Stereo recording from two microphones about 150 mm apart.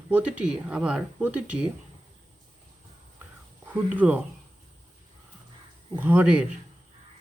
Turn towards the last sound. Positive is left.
turn(degrees=-10)  # may be behind; listen again after turning